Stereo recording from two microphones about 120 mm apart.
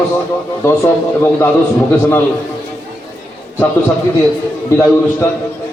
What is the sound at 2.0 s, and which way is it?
Speech, 15° left (ahead or behind).